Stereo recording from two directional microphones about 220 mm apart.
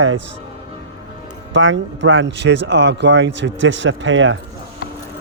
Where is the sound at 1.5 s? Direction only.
55° right (ahead or behind).